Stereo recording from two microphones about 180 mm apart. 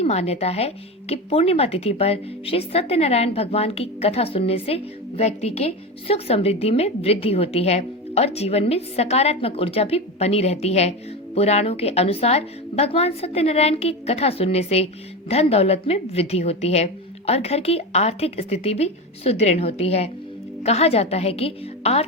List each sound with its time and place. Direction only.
0.0 s speech: 35° left (ahead or behind)